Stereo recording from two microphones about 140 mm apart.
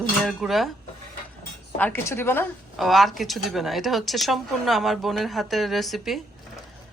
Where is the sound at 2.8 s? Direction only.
Centre (ahead or behind).